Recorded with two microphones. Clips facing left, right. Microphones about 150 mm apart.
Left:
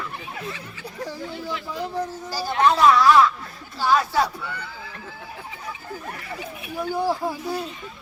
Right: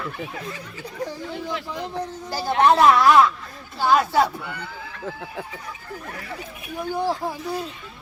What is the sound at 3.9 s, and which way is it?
Speech, 20° right (ahead or behind).